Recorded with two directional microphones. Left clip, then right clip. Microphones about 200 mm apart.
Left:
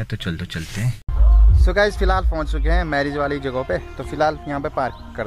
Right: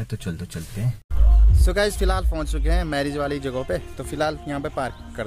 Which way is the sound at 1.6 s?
15° right (ahead or behind).